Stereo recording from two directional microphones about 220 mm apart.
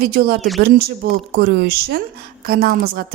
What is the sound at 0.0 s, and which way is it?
A woman's voice, 45° right (ahead or behind).